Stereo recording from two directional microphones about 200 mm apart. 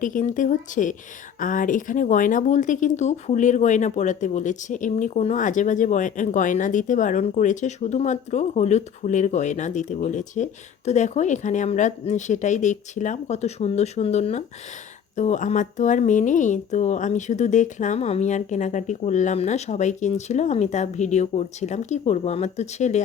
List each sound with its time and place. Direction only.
0.0 s speech: 40° left (ahead or behind)